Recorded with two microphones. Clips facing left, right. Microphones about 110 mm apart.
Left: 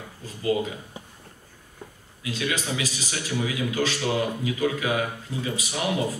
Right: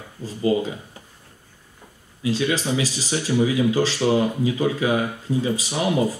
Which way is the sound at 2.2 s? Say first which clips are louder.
Right 6 dB; 35° right (ahead or behind).